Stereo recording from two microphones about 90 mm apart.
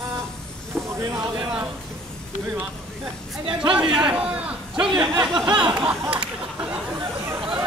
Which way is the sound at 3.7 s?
10° right (ahead or behind).